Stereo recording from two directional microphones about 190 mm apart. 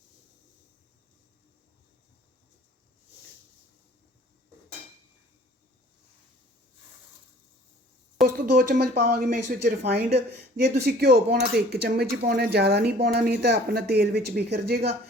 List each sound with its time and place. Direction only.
8.2 s a sound: centre (ahead or behind)
8.5 s speech: 45° right (ahead or behind)
9.6 s speech: 60° right (ahead or behind)